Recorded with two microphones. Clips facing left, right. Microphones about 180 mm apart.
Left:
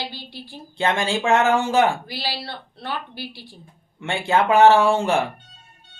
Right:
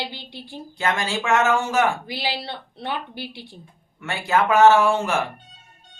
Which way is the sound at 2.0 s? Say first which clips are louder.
Right 2 dB; 20° right (ahead or behind).